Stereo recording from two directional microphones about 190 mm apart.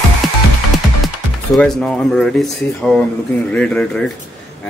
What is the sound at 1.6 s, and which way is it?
Speech, 5° left (ahead or behind).